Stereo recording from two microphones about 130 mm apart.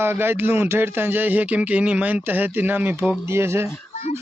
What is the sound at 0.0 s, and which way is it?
Speech, 15° right (ahead or behind).